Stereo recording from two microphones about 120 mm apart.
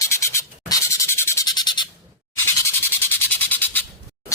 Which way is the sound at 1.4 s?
35° left (ahead or behind).